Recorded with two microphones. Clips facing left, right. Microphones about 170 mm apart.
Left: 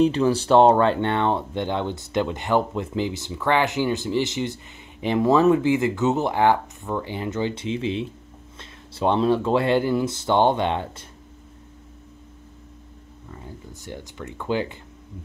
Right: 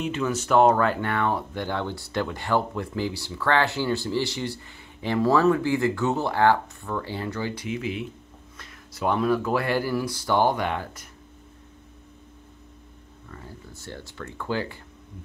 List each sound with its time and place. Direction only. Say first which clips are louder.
0.0 s speech: left 8 dB; 35° left (ahead or behind)
13.3 s speech: left 3 dB; 15° left (ahead or behind)